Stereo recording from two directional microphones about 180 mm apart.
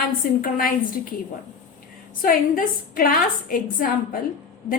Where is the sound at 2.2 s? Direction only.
50° left (ahead or behind).